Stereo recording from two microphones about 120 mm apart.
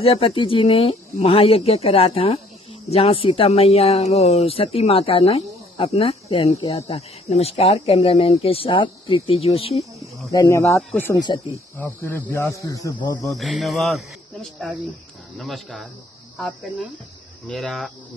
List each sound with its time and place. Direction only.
0.0 s speech: 55° left (ahead or behind)
10.3 s speech: 25° left (ahead or behind)
11.1 s speech: 35° left (ahead or behind)
11.8 s speech: 15° left (ahead or behind)
13.3 s speech: centre (ahead or behind)